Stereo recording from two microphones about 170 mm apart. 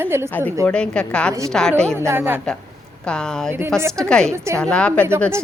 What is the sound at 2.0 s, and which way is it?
Speech, 15° right (ahead or behind).